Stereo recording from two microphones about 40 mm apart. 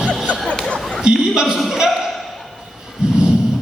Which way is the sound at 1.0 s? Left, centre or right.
Right.